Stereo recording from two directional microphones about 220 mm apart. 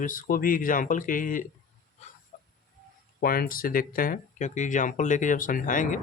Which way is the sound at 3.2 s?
40° left (ahead or behind).